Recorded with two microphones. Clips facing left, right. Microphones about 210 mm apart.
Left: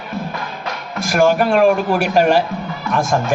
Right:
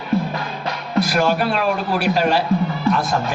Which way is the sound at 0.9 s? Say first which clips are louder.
Left 3 dB; 45° left (ahead or behind).